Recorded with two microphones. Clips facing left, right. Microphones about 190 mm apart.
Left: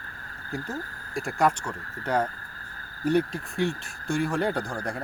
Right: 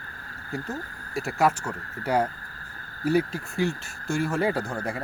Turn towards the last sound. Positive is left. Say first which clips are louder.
# right 1 dB
turn(degrees=-5)  # may be behind; listen again after turning